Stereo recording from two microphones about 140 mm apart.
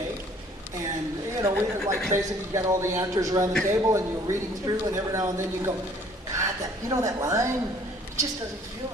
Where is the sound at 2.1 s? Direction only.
20° right (ahead or behind).